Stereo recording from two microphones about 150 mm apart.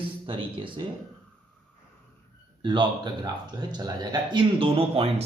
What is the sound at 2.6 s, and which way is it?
Speech, 30° right (ahead or behind).